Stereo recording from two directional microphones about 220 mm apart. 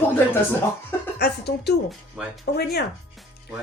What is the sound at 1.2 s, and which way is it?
Speech, 50° left (ahead or behind).